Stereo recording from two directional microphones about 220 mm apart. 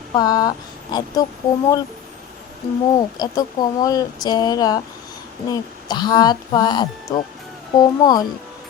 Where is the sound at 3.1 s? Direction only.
20° left (ahead or behind).